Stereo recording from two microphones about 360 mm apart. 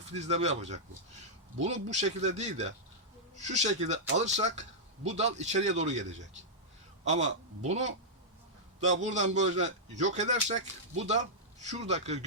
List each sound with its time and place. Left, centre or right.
0.1 s speech: centre
1.6 s speech: centre